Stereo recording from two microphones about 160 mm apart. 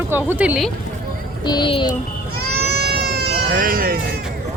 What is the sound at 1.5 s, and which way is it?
Speech, 30° left (ahead or behind).